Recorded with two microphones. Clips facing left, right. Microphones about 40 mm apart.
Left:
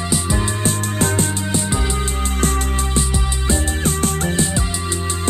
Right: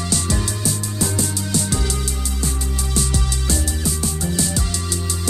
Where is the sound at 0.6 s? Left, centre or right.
Left.